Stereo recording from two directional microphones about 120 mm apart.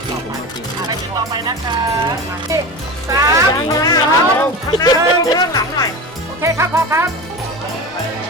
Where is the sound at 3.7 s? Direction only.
30° left (ahead or behind).